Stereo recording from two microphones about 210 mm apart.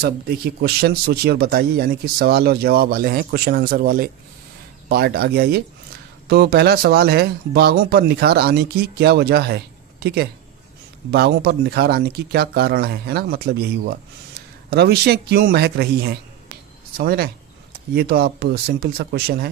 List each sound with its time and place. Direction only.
0.6 s speech: 50° right (ahead or behind)